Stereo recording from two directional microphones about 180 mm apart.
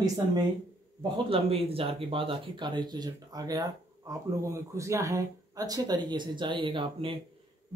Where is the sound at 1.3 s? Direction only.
30° right (ahead or behind).